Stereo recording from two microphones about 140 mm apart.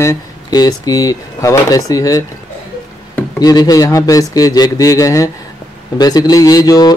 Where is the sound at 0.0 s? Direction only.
25° left (ahead or behind).